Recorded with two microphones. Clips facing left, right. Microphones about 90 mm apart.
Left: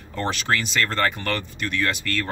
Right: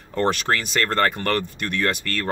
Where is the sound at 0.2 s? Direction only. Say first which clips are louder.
Right 3 dB; 45° right (ahead or behind).